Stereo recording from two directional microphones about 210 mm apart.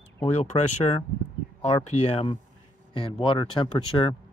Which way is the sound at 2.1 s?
25° left (ahead or behind).